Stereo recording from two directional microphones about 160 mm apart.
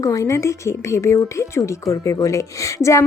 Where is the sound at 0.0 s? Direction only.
20° left (ahead or behind).